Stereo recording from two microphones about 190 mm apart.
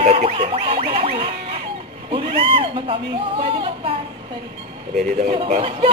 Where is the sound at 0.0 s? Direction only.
35° right (ahead or behind).